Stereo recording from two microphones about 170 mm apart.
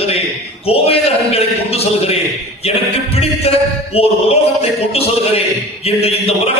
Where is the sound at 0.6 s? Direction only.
35° left (ahead or behind).